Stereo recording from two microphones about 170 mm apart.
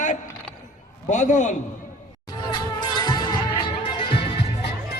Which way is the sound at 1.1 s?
45° left (ahead or behind).